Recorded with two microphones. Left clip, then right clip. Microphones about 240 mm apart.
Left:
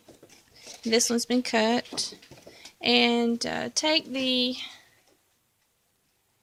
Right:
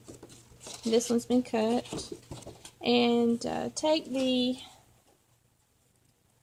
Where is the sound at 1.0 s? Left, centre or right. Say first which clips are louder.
Left 2 dB; left.